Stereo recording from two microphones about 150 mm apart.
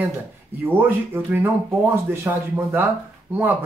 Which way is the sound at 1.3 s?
15° right (ahead or behind).